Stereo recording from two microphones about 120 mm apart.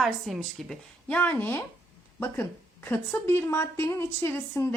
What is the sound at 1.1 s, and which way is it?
A woman's voice, 15° left (ahead or behind).